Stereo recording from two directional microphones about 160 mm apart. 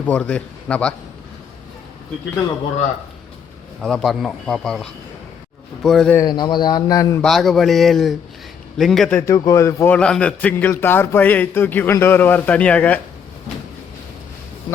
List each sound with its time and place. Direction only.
0.0 s a man's voice: 10° left (ahead or behind)
3.8 s speech: centre (ahead or behind)
6.1 s a man's voice: 25° left (ahead or behind)
7.2 s speech: centre (ahead or behind)
9.2 s a man's voice: 20° left (ahead or behind)